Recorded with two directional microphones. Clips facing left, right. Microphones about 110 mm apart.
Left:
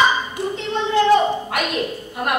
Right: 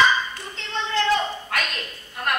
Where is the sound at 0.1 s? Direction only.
20° left (ahead or behind).